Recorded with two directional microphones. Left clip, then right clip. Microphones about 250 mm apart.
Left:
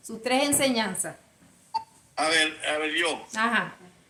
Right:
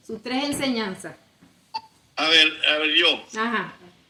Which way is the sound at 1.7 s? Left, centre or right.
Centre.